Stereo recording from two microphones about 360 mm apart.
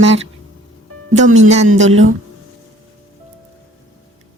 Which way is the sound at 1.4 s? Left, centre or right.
Centre.